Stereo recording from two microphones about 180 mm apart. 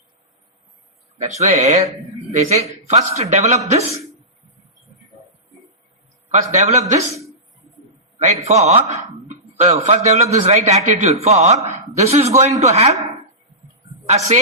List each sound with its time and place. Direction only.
1.4 s a man's voice: 35° right (ahead or behind)
6.3 s a man's voice: 40° right (ahead or behind)
8.2 s a man's voice: 35° right (ahead or behind)
14.1 s a man's voice: 35° right (ahead or behind)